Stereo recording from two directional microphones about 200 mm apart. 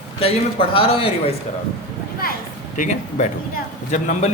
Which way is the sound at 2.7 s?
40° left (ahead or behind).